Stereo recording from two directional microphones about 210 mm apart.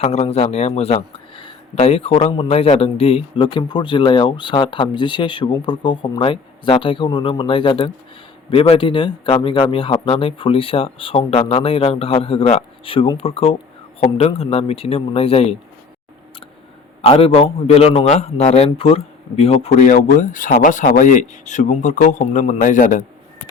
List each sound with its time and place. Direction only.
0.0 s speech: 30° left (ahead or behind)
17.0 s a man's voice: 25° left (ahead or behind)